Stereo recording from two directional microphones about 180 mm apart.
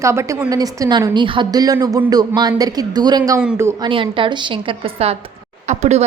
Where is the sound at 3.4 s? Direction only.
10° right (ahead or behind).